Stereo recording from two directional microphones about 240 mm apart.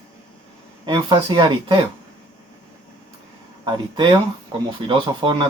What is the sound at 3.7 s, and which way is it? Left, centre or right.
Speech, centre.